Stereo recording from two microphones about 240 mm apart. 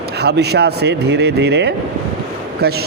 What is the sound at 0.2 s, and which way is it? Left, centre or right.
A man's voice, right.